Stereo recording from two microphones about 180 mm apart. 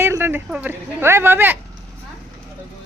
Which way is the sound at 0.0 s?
10° right (ahead or behind).